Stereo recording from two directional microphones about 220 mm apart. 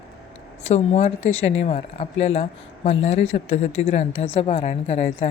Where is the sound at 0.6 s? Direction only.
30° left (ahead or behind).